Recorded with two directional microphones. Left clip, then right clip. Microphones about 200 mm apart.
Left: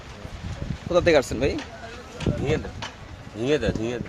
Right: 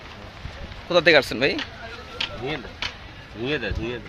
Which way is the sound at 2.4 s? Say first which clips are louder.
Left 3 dB; 45° left (ahead or behind).